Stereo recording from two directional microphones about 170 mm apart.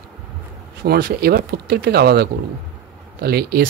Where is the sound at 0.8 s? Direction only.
65° right (ahead or behind).